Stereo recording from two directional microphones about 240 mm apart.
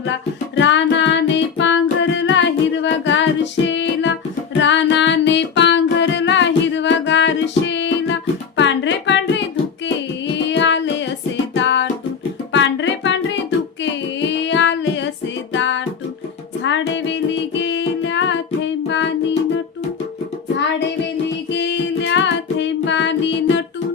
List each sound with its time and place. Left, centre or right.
0.5 s music: left
21.5 s music: left